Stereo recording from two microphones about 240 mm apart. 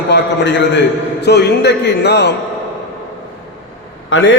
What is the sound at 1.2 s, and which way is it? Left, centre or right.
A man's voice, left.